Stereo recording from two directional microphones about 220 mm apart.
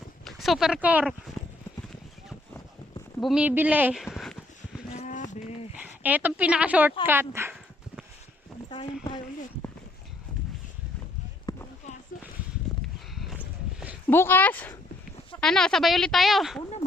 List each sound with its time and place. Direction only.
0.3 s speech: centre (ahead or behind)
3.2 s speech: centre (ahead or behind)
4.9 s a sound: 35° left (ahead or behind)
5.7 s speech: 5° right (ahead or behind)
11.5 s a sound: 20° left (ahead or behind)
14.1 s speech: 10° left (ahead or behind)